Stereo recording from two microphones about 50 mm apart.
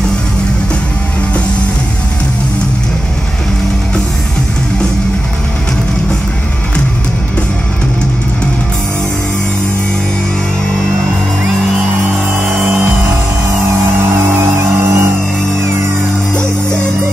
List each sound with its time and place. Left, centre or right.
14.1 s music: right